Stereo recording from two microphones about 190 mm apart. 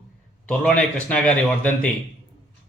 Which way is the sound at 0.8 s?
5° left (ahead or behind).